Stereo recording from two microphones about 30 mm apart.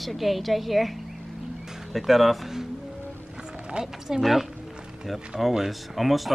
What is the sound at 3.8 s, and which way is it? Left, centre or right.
Speech, right.